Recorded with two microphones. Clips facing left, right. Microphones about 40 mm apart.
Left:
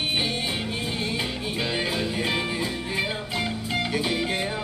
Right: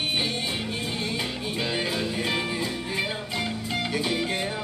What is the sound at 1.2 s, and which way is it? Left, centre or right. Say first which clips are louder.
Music: left 1 dB; centre.